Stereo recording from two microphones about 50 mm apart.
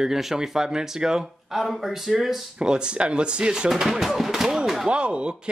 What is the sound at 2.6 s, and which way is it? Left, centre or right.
Speech, centre.